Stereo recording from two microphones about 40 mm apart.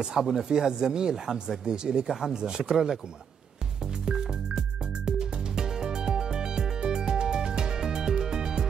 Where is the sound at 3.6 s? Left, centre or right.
Centre.